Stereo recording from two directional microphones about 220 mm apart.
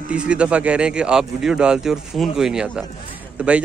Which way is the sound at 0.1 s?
5° right (ahead or behind).